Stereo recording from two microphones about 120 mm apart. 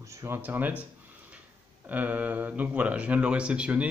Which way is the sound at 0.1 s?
20° right (ahead or behind).